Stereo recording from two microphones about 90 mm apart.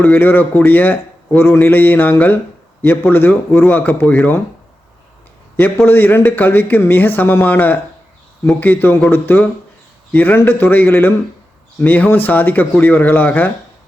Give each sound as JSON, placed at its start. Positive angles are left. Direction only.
{"t": 0.0, "sound": "speech", "side_deg": 20}
{"t": 5.7, "sound": "speech", "side_deg": 25}